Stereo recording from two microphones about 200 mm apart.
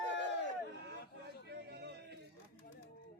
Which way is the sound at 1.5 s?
55° right (ahead or behind).